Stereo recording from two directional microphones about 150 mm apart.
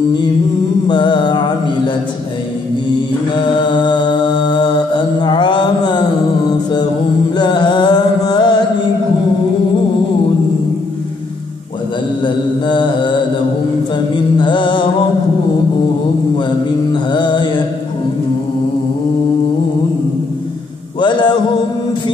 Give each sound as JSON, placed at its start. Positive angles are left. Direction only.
{"t": 0.8, "sound": "mantra", "side_deg": 30}
{"t": 3.4, "sound": "mantra", "side_deg": 30}
{"t": 7.3, "sound": "music", "side_deg": 30}
{"t": 12.2, "sound": "mantra", "side_deg": 30}
{"t": 14.4, "sound": "music", "side_deg": 30}
{"t": 16.9, "sound": "mantra", "side_deg": 30}
{"t": 21.0, "sound": "a sound", "side_deg": 30}